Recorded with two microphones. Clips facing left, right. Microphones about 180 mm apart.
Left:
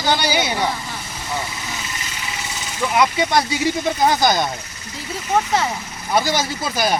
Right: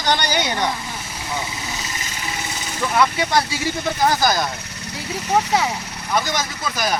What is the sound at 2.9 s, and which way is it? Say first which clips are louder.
Speech: left 1 dB; 15° left (ahead or behind).